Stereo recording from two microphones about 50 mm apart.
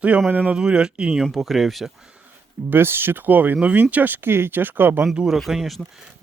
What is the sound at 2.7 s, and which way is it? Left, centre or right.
Speech, right.